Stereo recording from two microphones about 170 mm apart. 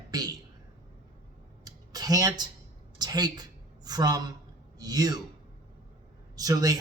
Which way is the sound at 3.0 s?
25° right (ahead or behind).